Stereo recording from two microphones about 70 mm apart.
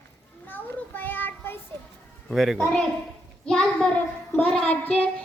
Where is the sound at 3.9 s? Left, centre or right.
Left.